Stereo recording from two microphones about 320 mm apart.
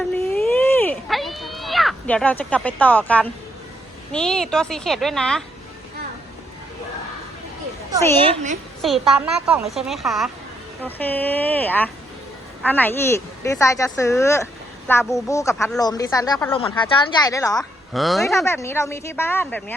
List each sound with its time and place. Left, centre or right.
0.1 s a sound: centre
4.1 s a woman's voice: centre
8.2 s a woman's voice: centre
8.8 s a woman's voice: centre